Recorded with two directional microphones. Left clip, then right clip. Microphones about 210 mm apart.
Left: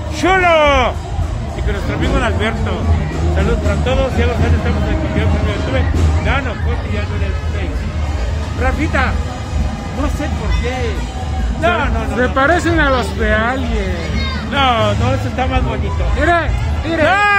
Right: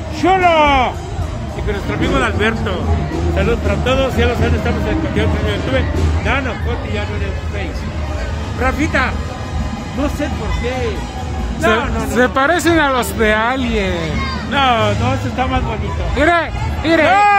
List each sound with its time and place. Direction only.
0.2 s speech: 15° left (ahead or behind)
2.0 s speech: 20° right (ahead or behind)
3.3 s speech: 45° right (ahead or behind)
8.6 s speech: 45° right (ahead or behind)
12.2 s speech: 50° right (ahead or behind)
14.5 s speech: 15° right (ahead or behind)
16.2 s speech: 45° right (ahead or behind)
17.1 s speech: 5° right (ahead or behind)